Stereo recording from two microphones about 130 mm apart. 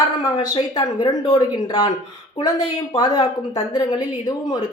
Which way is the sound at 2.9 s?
30° left (ahead or behind).